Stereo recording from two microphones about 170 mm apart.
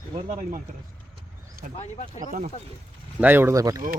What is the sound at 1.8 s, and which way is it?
Speech, 40° left (ahead or behind).